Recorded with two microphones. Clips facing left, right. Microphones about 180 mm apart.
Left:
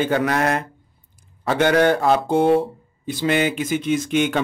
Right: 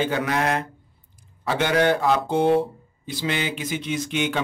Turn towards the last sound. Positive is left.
turn(degrees=50)  # may be behind; listen again after turning